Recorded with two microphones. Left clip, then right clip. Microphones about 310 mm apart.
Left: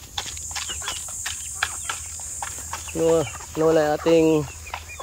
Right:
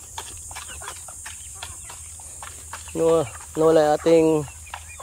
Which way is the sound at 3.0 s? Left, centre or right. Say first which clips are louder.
Right 1 dB; centre.